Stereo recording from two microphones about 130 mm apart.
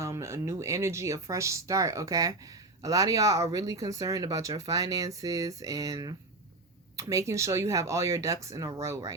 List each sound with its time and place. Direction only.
0.0 s speech: 20° right (ahead or behind)